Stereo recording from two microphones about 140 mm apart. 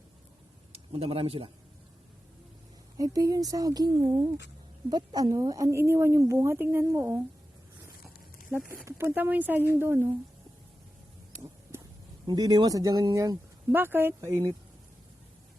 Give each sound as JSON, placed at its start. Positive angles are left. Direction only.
{"t": 0.7, "sound": "speech", "side_deg": -45}
{"t": 3.0, "sound": "a woman's voice", "side_deg": -25}
{"t": 8.8, "sound": "speech", "side_deg": -15}
{"t": 12.2, "sound": "a woman's voice", "side_deg": -30}